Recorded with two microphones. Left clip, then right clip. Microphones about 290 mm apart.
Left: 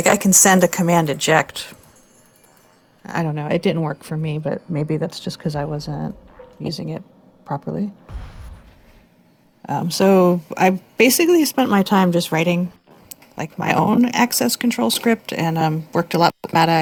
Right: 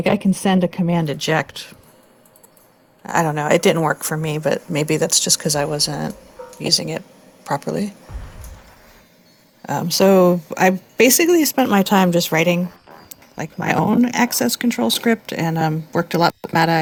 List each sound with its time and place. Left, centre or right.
0.0 s a woman's voice: left
1.0 s speech: centre
3.0 s speech: centre
3.2 s speech: right
4.9 s speech: right
9.6 s speech: centre